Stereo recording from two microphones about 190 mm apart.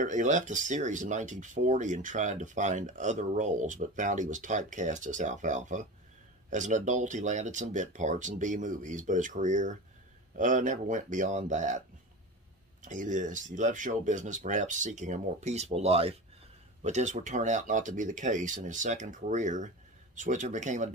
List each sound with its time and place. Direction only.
0.0 s speech: 40° right (ahead or behind)
12.8 s speech: 40° right (ahead or behind)